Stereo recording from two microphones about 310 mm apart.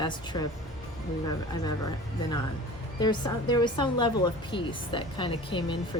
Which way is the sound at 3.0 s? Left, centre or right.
Centre.